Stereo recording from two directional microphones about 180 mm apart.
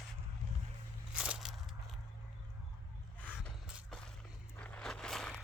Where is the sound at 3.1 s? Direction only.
5° left (ahead or behind).